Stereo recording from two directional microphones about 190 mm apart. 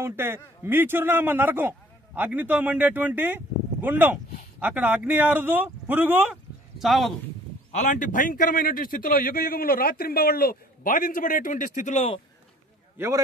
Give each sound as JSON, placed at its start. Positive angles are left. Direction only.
{"t": 0.0, "sound": "a man's voice", "side_deg": -10}
{"t": 7.8, "sound": "a man's voice", "side_deg": 40}
{"t": 12.9, "sound": "a man's voice", "side_deg": -10}